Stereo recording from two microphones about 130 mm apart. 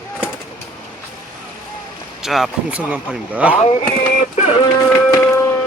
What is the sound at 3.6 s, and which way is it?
Speech, 55° left (ahead or behind).